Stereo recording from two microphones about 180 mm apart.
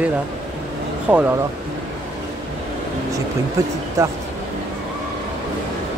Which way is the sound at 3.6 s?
20° right (ahead or behind).